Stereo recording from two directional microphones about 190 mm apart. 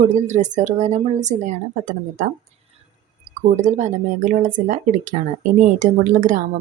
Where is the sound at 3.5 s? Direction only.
40° right (ahead or behind).